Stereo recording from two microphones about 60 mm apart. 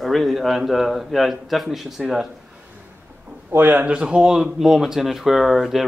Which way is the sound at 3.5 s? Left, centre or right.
Right.